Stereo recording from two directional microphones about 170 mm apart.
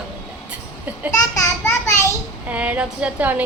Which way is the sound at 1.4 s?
15° left (ahead or behind).